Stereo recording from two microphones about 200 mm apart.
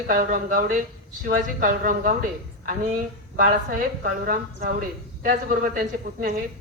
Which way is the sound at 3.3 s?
40° right (ahead or behind).